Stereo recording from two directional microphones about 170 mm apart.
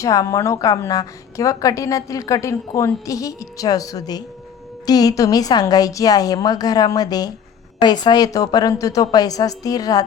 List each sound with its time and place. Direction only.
0.0 s a woman's voice: 20° left (ahead or behind)